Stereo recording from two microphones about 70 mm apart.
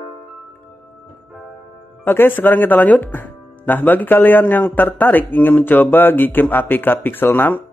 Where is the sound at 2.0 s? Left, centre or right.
Left.